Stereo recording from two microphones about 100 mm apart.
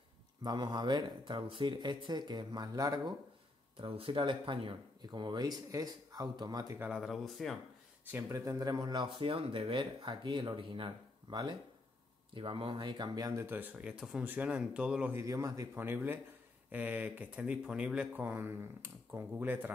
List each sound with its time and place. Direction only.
0.4 s speech: 45° right (ahead or behind)
3.7 s speech: 65° right (ahead or behind); by 6.8 s 40° right (ahead or behind)
7.0 s speech: centre (ahead or behind)
8.1 s speech: 30° right (ahead or behind); by 11.3 s 55° right (ahead or behind)
12.4 s speech: 65° right (ahead or behind); by 13.3 s 45° right (ahead or behind)
13.4 s speech: 20° right (ahead or behind)
14.2 s speech: 15° right (ahead or behind)
15.1 s speech: 30° right (ahead or behind)
15.7 s speech: 20° right (ahead or behind)